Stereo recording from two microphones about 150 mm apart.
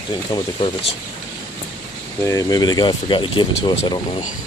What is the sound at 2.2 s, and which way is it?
Speech, 25° left (ahead or behind).